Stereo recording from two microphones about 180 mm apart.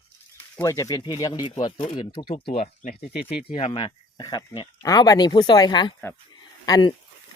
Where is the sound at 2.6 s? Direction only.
45° left (ahead or behind).